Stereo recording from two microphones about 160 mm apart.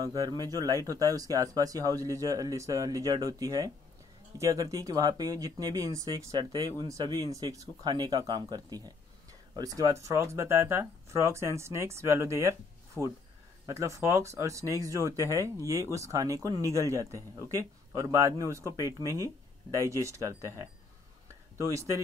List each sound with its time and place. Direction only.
0.0 s speech: 25° right (ahead or behind)